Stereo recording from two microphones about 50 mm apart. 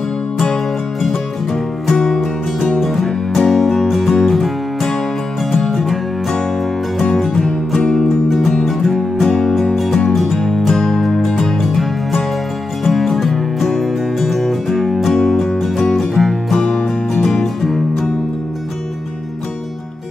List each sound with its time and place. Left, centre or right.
1.5 s music: centre
7.3 s music: centre
8.6 s music: centre
15.8 s music: centre